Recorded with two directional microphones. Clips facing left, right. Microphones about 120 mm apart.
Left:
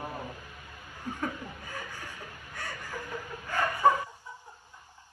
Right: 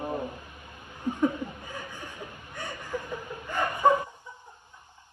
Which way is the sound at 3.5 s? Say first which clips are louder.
Right 2 dB; 20° right (ahead or behind).